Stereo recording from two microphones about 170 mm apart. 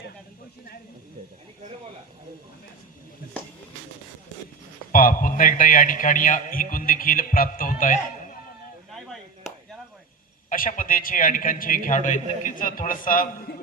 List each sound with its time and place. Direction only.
4.9 s a man's voice: 55° left (ahead or behind)
10.5 s a man's voice: 55° left (ahead or behind)